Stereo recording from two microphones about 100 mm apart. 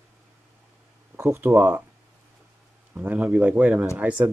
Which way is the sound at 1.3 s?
20° right (ahead or behind).